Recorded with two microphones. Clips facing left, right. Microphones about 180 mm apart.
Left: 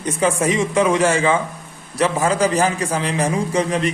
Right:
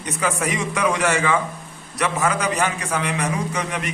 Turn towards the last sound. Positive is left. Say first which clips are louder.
# left 7 dB
turn(degrees=30)  # may be behind; listen again after turning